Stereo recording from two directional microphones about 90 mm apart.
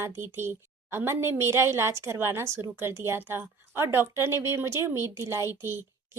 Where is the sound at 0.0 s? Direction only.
30° right (ahead or behind).